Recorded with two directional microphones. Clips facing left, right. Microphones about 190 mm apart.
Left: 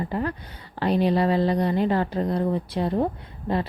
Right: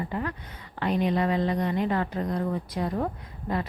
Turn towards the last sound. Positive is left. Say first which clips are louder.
# left 4 dB
turn(degrees=30)  # may be behind; listen again after turning